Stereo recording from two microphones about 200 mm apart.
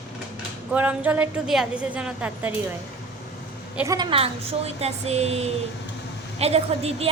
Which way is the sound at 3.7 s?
15° right (ahead or behind).